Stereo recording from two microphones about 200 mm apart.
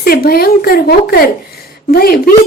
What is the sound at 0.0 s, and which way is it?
A woman's voice, 50° left (ahead or behind).